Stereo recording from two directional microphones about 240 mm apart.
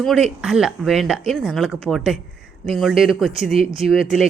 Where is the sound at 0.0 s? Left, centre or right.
Centre.